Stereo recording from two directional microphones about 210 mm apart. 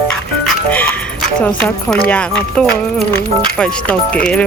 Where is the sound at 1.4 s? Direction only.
5° left (ahead or behind).